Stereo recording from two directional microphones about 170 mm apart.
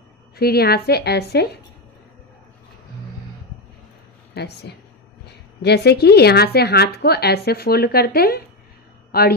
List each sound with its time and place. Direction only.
0.4 s a woman's voice: 70° left (ahead or behind)
4.3 s a sound: 75° left (ahead or behind)
5.6 s a woman's voice: 75° left (ahead or behind)